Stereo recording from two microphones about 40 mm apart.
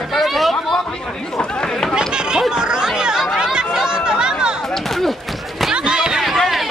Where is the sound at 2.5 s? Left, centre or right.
Right.